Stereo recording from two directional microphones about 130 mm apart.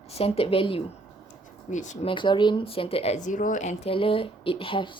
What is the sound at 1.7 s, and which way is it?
Speech, 70° left (ahead or behind).